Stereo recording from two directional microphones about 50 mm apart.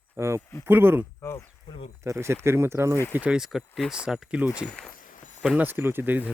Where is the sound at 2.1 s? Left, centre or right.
Right.